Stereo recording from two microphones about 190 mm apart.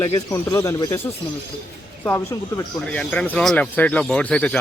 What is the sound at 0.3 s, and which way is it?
Speech, 15° left (ahead or behind).